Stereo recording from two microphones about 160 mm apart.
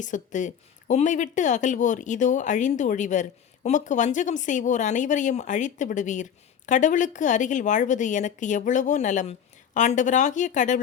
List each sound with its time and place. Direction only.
0.0 s speech: 50° left (ahead or behind)